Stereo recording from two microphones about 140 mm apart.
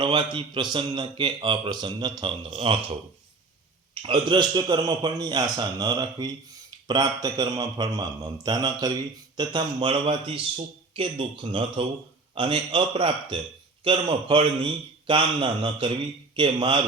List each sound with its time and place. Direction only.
0.0 s a man's voice: 35° right (ahead or behind)
4.0 s a man's voice: 40° right (ahead or behind)